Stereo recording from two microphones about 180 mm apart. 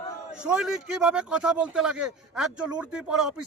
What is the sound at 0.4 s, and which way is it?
Speech, 5° right (ahead or behind).